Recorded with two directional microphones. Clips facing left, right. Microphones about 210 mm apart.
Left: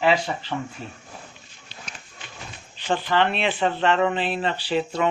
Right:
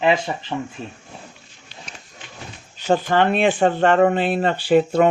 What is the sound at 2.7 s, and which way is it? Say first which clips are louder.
Speech: right 5 dB; 45° right (ahead or behind).